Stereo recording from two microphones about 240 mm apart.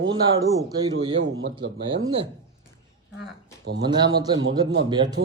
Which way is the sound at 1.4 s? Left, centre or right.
Right.